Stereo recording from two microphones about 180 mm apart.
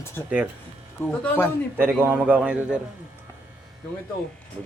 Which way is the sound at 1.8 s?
10° right (ahead or behind).